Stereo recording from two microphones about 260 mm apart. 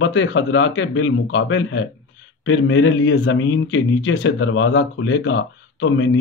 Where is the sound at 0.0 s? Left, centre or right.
Left.